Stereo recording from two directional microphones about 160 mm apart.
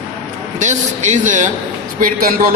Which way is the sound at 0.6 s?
50° right (ahead or behind).